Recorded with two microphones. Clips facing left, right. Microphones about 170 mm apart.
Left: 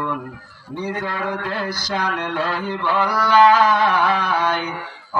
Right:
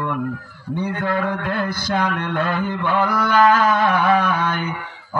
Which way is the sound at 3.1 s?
50° right (ahead or behind).